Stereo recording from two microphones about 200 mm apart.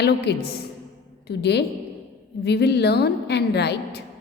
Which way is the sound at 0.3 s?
55° left (ahead or behind).